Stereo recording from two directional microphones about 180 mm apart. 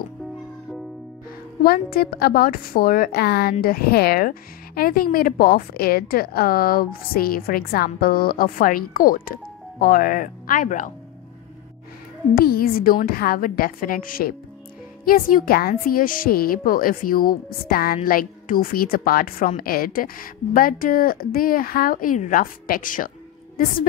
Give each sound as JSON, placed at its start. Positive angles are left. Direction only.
{"t": 1.6, "sound": "a woman's voice", "side_deg": 55}
{"t": 12.4, "sound": "a woman's voice", "side_deg": 55}